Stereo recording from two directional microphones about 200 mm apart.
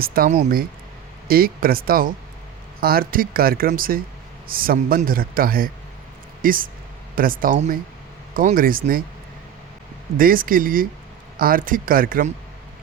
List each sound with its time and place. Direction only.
0.0 s a man's voice: 45° right (ahead or behind)
10.2 s a man's voice: 45° right (ahead or behind)